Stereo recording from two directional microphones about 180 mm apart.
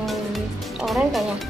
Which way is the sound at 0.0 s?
Centre (ahead or behind).